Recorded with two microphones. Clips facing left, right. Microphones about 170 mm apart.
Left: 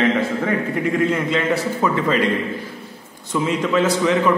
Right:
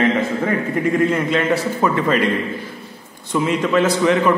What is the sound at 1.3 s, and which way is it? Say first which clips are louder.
Speech: right 2 dB; 55° right (ahead or behind).